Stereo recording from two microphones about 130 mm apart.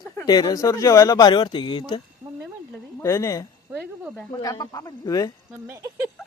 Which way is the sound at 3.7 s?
15° right (ahead or behind).